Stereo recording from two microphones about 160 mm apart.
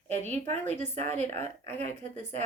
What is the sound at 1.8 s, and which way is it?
Speech, 50° right (ahead or behind).